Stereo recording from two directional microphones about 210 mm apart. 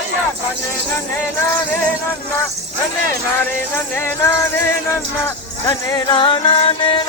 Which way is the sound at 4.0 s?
10° left (ahead or behind).